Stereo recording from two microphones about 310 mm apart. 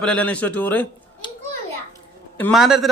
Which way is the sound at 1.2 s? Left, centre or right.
Centre.